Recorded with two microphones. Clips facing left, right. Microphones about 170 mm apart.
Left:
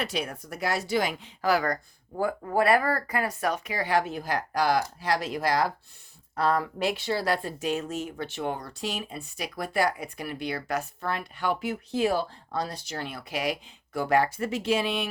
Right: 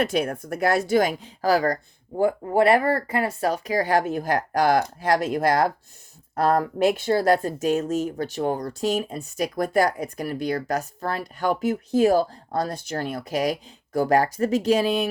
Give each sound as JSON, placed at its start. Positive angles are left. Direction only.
{"t": 0.0, "sound": "speech", "side_deg": -50}